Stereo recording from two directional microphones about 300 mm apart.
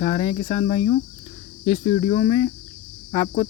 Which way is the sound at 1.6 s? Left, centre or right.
Centre.